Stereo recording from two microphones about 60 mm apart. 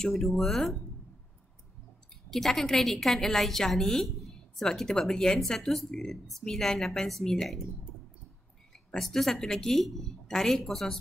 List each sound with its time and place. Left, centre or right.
0.0 s a woman's voice: centre
2.3 s a woman's voice: centre
8.7 s a woman's voice: centre